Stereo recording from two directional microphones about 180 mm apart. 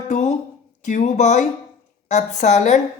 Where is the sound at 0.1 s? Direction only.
40° left (ahead or behind).